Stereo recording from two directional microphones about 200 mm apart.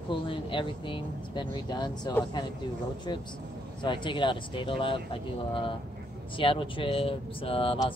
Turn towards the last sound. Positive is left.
turn(degrees=25)  # may be behind; listen again after turning